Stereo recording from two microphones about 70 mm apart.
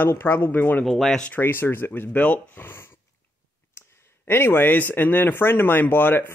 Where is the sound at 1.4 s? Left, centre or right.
Left.